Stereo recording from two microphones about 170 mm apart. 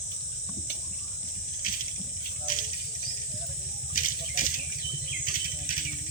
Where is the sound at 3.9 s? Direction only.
50° left (ahead or behind).